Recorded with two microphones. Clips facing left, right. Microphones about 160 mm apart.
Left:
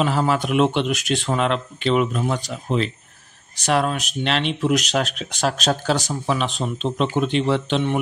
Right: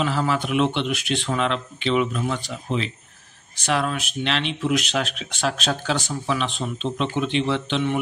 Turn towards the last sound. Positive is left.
turn(degrees=40)  # may be behind; listen again after turning